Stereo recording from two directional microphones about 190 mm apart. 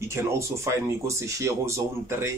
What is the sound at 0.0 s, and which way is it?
Speech, 15° right (ahead or behind).